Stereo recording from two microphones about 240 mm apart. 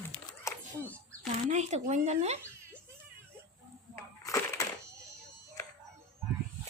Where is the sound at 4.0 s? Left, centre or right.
Centre.